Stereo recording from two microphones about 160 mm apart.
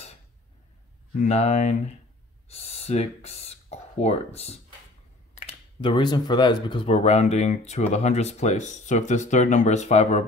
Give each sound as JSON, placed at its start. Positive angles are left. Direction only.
{"t": 1.1, "sound": "speech", "side_deg": 45}
{"t": 5.5, "sound": "speech", "side_deg": 30}